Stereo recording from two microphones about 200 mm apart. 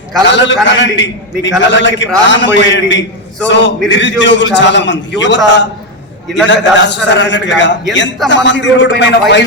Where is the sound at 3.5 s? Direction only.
60° left (ahead or behind).